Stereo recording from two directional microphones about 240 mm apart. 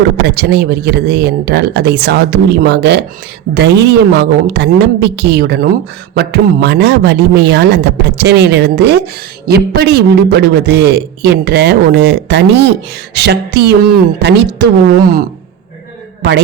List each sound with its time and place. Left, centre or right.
0.3 s a man's voice: right